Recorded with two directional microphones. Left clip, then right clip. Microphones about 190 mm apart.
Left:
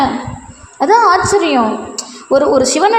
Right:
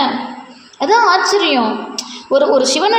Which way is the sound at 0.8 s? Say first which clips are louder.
Left 2 dB; 30° left (ahead or behind).